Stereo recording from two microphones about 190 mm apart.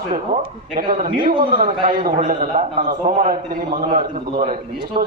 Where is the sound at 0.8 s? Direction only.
50° right (ahead or behind).